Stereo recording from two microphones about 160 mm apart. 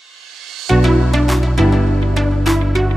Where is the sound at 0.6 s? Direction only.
Centre (ahead or behind).